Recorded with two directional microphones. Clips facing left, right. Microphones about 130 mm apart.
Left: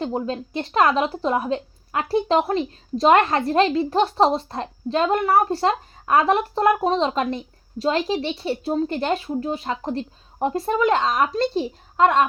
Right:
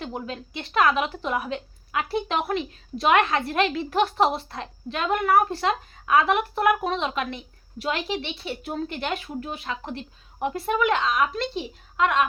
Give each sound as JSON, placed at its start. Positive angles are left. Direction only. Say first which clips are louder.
{"t": 0.0, "sound": "speech", "louder": "left 7 dB", "side_deg": 30}